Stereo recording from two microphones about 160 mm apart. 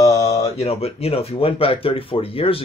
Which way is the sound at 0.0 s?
20° left (ahead or behind).